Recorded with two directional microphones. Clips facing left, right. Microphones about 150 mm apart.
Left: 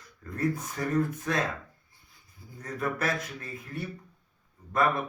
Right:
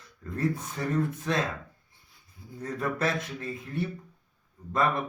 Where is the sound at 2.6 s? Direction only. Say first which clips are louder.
Right 1 dB; 25° right (ahead or behind).